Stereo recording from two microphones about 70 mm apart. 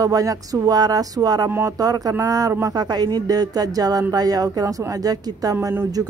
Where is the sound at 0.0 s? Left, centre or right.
Right.